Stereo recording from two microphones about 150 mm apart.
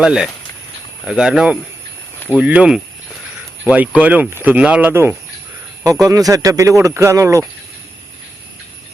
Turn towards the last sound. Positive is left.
turn(degrees=-20)  # may be behind; listen again after turning